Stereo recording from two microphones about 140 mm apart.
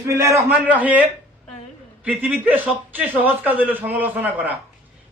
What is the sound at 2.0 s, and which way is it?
A man's voice, 10° right (ahead or behind).